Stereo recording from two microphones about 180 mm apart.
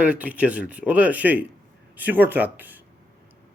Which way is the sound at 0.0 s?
10° right (ahead or behind).